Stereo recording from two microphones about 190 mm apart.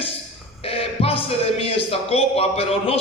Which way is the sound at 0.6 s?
30° left (ahead or behind).